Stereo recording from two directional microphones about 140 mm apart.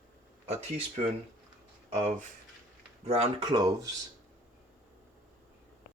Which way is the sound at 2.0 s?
55° right (ahead or behind).